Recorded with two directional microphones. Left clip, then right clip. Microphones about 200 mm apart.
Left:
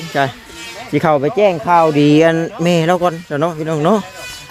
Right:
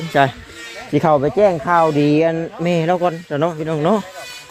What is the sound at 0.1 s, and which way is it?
Speech, 30° right (ahead or behind).